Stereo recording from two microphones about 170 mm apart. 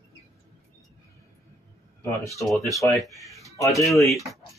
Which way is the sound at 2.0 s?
20° left (ahead or behind).